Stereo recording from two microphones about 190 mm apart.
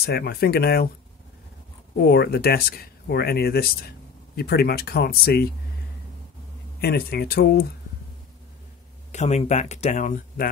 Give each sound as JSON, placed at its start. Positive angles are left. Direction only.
{"t": 0.0, "sound": "speech", "side_deg": 55}
{"t": 2.0, "sound": "speech", "side_deg": 55}
{"t": 6.8, "sound": "speech", "side_deg": 55}
{"t": 9.1, "sound": "speech", "side_deg": 35}